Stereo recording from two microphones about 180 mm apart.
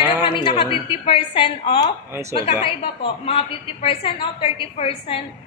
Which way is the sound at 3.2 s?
30° left (ahead or behind).